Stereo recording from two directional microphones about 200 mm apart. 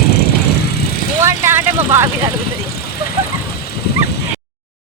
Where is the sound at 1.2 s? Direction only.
10° right (ahead or behind).